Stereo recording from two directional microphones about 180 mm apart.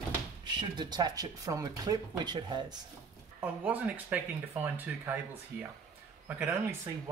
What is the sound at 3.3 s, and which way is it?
Speech, 10° right (ahead or behind).